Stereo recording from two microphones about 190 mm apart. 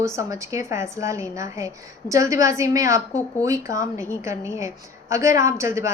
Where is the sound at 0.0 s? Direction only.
15° right (ahead or behind).